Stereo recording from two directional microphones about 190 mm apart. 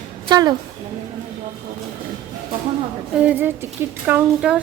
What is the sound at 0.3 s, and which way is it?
Speech, 20° right (ahead or behind).